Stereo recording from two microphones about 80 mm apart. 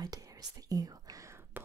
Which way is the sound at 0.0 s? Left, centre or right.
Right.